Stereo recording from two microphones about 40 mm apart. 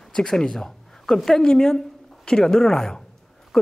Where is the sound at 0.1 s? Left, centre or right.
Centre.